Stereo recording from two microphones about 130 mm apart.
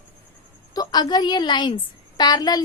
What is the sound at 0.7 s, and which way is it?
A woman's voice, 30° left (ahead or behind).